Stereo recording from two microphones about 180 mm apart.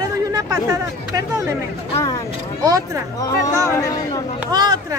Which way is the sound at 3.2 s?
15° left (ahead or behind).